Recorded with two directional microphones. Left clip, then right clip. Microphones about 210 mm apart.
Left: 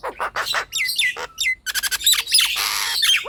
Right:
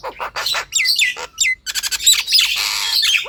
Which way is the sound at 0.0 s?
15° left (ahead or behind).